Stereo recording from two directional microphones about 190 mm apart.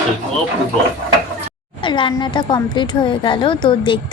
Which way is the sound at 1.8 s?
25° left (ahead or behind).